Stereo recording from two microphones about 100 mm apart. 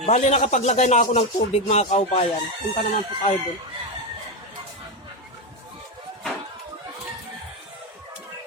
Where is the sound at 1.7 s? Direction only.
90° left.